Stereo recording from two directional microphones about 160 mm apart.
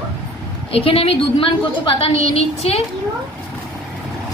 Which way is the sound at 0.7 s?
35° left (ahead or behind).